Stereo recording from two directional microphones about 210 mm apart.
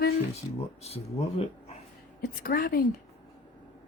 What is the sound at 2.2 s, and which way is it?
Speech, 45° left (ahead or behind).